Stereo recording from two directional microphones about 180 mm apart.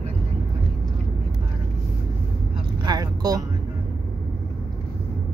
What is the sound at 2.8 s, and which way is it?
Vehicle, 20° right (ahead or behind).